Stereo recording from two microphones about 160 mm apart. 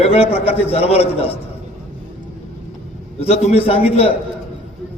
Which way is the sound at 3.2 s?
40° left (ahead or behind).